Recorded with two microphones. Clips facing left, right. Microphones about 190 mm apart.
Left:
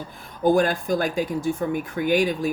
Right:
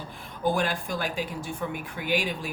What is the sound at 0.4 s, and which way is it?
Speech, 40° left (ahead or behind).